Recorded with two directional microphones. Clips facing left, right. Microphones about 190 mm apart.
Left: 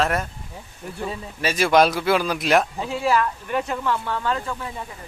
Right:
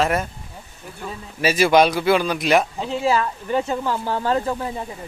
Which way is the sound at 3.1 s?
25° right (ahead or behind).